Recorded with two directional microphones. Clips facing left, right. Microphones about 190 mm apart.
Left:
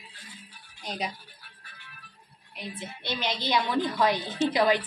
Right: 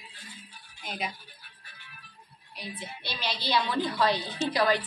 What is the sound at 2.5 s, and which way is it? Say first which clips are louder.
A woman's voice: left 2 dB; 20° left (ahead or behind).